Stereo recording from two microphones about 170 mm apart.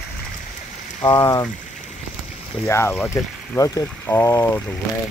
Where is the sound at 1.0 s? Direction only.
20° left (ahead or behind).